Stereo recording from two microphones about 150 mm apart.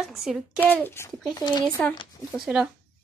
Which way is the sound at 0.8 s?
15° left (ahead or behind).